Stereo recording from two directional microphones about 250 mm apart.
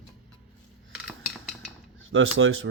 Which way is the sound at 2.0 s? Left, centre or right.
Right.